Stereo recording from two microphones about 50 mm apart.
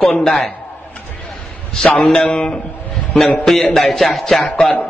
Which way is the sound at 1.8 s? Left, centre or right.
Centre.